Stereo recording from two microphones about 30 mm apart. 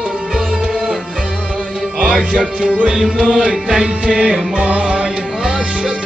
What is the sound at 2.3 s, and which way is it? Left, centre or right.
Music, right.